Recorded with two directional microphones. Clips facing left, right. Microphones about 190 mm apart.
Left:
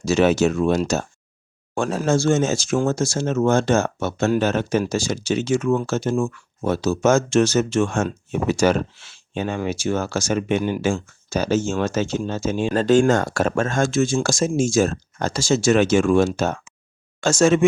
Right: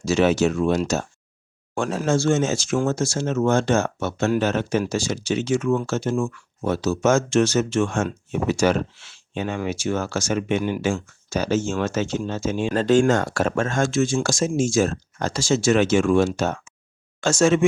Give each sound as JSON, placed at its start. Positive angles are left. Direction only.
{"t": 0.0, "sound": "speech", "side_deg": 45}